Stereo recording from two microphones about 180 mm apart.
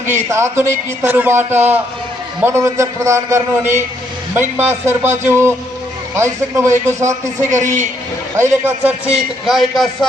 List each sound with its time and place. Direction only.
0.1 s a man's voice: 15° right (ahead or behind)